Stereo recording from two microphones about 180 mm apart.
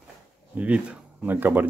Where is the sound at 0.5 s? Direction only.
10° right (ahead or behind).